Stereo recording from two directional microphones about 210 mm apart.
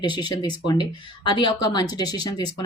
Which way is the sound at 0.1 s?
20° left (ahead or behind).